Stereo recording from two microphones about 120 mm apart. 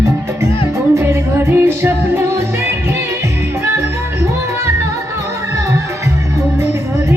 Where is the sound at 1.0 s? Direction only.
20° right (ahead or behind).